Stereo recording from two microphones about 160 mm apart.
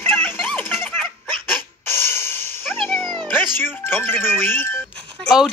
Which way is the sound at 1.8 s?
15° left (ahead or behind).